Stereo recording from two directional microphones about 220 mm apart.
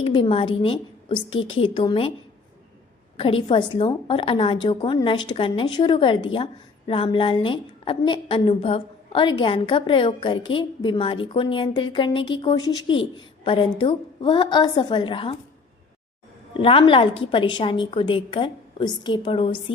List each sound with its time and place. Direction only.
0.0 s a woman's voice: 25° left (ahead or behind)
3.2 s a woman's voice: 25° left (ahead or behind)
16.6 s a woman's voice: 25° left (ahead or behind)